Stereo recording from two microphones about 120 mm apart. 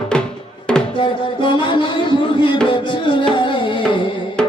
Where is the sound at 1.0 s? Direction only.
45° left (ahead or behind).